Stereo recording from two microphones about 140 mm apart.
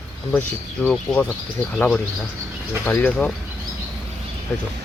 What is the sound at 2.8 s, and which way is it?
Speech, 10° left (ahead or behind).